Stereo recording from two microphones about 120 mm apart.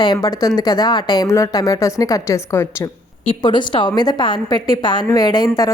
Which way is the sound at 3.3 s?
45° left (ahead or behind).